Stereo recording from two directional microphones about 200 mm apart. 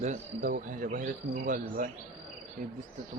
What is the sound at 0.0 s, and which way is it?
Speech, 35° right (ahead or behind).